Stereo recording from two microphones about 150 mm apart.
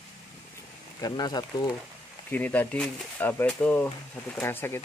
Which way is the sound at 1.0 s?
30° left (ahead or behind).